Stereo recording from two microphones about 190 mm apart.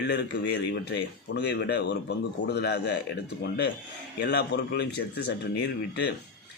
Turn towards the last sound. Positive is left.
turn(degrees=60)  # may be behind; listen again after turning